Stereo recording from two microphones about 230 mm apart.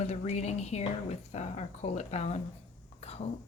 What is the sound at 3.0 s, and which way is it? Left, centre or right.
Whispering, left.